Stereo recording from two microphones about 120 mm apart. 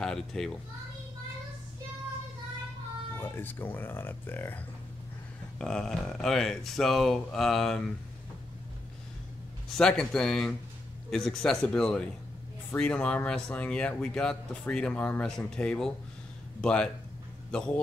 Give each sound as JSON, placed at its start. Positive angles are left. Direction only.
{"t": 0.0, "sound": "a child's voice", "side_deg": 5}
{"t": 3.2, "sound": "speech", "side_deg": 15}
{"t": 5.6, "sound": "speech", "side_deg": 5}
{"t": 9.8, "sound": "speech", "side_deg": 5}